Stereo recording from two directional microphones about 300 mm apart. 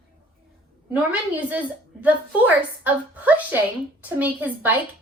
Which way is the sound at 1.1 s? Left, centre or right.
Centre.